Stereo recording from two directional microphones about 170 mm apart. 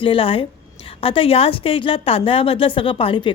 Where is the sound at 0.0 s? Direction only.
30° left (ahead or behind).